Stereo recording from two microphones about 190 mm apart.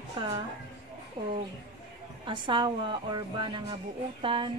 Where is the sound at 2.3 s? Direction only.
25° right (ahead or behind).